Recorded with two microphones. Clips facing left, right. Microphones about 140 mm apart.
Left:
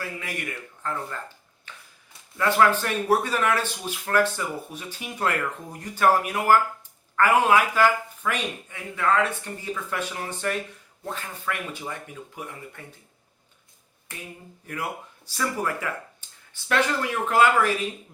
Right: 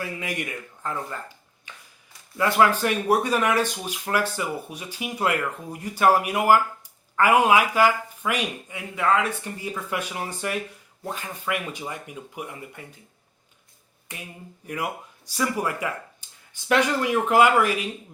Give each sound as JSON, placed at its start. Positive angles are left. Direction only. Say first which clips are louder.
{"t": 0.0, "sound": "speech", "louder": "right 3 dB", "side_deg": -15}
{"t": 1.7, "sound": "a sound", "louder": "even", "side_deg": -15}
{"t": 2.5, "sound": "speech", "louder": "even", "side_deg": -15}
{"t": 15.3, "sound": "speech", "louder": "right 2 dB", "side_deg": -10}